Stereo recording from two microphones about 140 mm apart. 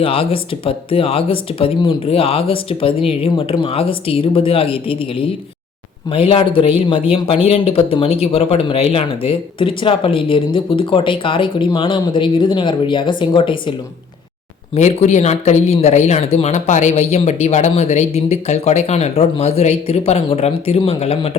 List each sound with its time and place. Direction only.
0.0 s speech: 40° left (ahead or behind)
14.8 s speech: 55° left (ahead or behind)